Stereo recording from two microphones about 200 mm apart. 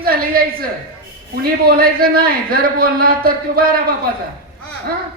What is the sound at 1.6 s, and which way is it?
A man's voice, 50° right (ahead or behind).